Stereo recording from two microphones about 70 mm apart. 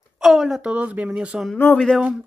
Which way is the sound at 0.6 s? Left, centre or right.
Centre.